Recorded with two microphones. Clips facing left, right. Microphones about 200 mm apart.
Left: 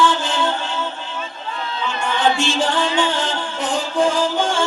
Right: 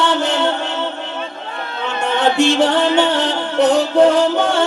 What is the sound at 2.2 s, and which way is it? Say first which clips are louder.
Music: right 6 dB; 65° right (ahead or behind).